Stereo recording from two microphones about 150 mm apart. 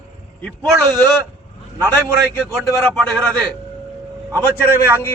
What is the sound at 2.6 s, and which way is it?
Speech, 5° left (ahead or behind).